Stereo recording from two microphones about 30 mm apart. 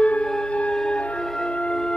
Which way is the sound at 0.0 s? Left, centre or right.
Left.